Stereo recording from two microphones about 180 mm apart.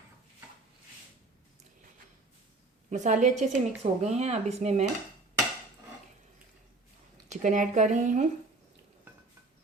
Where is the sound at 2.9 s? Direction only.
45° right (ahead or behind).